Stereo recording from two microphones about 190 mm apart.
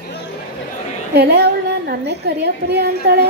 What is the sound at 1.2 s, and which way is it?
Female singing, 55° right (ahead or behind).